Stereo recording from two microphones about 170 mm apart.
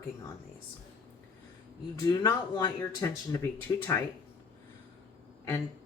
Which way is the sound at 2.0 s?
20° left (ahead or behind).